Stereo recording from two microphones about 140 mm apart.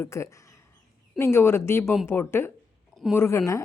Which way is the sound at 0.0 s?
20° left (ahead or behind).